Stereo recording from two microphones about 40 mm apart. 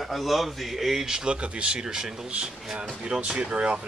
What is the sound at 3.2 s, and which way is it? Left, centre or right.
Speech, right.